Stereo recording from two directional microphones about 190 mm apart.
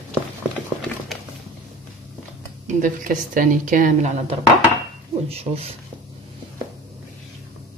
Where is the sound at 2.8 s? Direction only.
45° right (ahead or behind).